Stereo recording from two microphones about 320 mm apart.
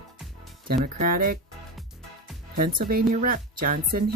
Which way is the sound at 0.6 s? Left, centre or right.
Right.